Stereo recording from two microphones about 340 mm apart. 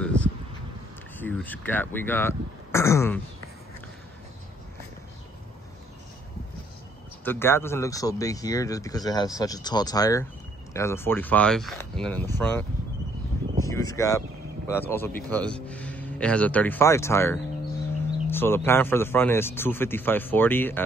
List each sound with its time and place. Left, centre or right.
0.0 s a sound: centre
1.1 s speech: centre
7.2 s speech: centre
13.7 s speech: centre